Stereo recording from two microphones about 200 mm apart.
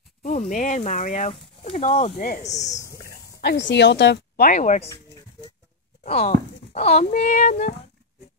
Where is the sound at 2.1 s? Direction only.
45° left (ahead or behind).